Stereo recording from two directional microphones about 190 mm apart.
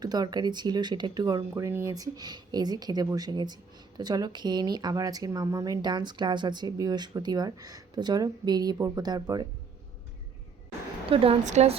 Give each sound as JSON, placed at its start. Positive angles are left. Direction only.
{"t": 0.0, "sound": "speech", "side_deg": -20}
{"t": 11.1, "sound": "a woman's voice", "side_deg": -30}